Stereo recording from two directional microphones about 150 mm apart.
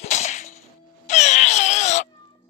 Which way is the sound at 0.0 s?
50° left (ahead or behind).